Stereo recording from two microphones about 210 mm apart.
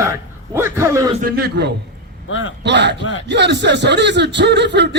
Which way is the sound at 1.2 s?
50° right (ahead or behind).